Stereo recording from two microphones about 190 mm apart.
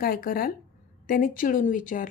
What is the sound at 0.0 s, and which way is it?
A woman's voice, 50° left (ahead or behind).